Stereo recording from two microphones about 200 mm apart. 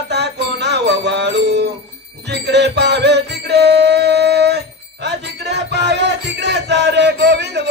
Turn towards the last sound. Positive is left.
turn(degrees=-55)  # may be behind; listen again after turning